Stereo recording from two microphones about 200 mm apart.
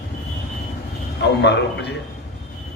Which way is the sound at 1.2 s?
60° left (ahead or behind).